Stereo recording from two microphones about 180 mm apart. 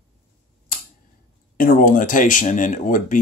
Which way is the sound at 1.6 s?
50° left (ahead or behind).